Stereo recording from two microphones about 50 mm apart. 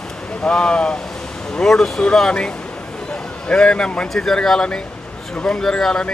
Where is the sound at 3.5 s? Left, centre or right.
Centre.